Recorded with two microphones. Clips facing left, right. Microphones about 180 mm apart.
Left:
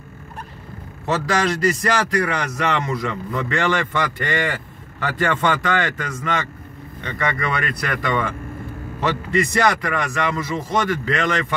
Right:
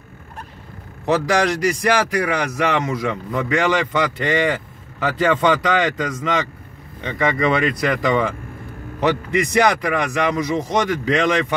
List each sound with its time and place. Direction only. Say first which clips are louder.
1.0 s a man's voice: right 3 dB; 15° right (ahead or behind)